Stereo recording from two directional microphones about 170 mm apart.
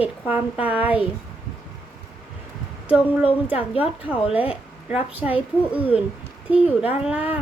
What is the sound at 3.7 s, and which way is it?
Speech, 30° left (ahead or behind).